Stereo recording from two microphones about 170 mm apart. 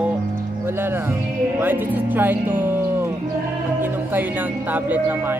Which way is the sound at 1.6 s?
10° right (ahead or behind).